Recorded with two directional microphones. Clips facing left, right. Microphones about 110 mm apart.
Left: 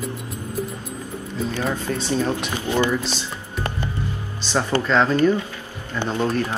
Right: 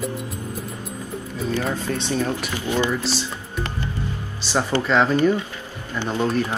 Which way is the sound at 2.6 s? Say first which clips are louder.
Left 1 dB; 20° right (ahead or behind).